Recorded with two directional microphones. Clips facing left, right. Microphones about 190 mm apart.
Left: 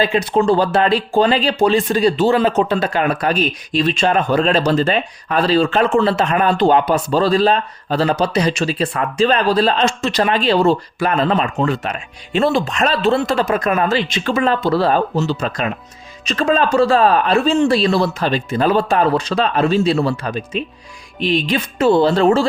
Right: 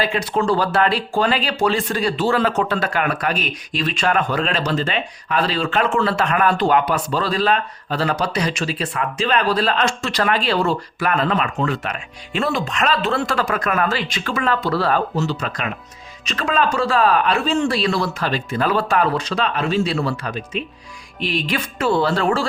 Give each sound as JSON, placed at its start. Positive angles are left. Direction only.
{"t": 0.0, "sound": "speech", "side_deg": 25}